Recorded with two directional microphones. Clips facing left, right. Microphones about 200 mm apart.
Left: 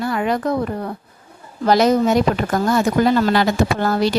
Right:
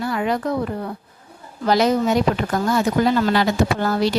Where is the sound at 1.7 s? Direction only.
45° left (ahead or behind).